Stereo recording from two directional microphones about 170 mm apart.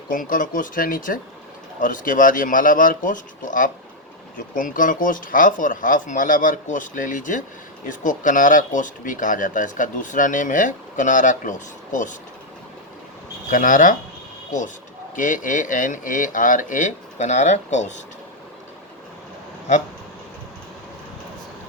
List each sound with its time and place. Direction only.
0.1 s speech: 55° left (ahead or behind)
13.5 s speech: 50° left (ahead or behind)
15.1 s speech: 50° left (ahead or behind)